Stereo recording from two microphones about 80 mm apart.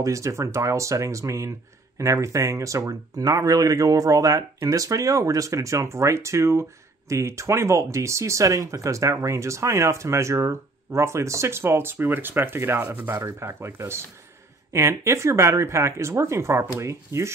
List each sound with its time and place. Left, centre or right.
0.0 s speech: right